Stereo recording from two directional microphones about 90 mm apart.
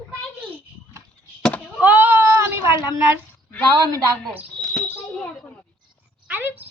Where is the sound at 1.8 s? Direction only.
20° right (ahead or behind).